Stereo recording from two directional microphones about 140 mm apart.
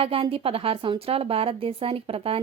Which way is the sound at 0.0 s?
40° right (ahead or behind).